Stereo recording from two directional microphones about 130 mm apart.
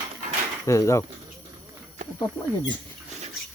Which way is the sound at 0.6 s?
25° left (ahead or behind).